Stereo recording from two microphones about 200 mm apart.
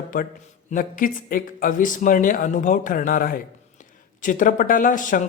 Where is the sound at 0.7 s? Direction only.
45° left (ahead or behind).